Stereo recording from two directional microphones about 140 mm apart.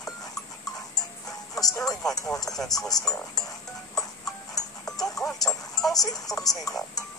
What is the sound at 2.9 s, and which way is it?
Speech, 25° left (ahead or behind).